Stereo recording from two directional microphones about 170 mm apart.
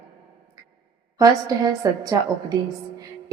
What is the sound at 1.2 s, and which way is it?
Speech, 20° right (ahead or behind).